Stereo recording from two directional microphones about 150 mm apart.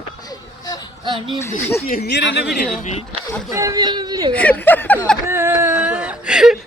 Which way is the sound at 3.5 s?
20° right (ahead or behind).